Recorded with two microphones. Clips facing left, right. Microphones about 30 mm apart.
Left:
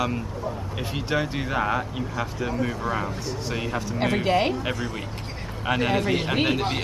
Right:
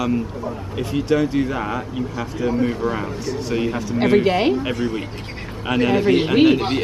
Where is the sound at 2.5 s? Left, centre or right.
Right.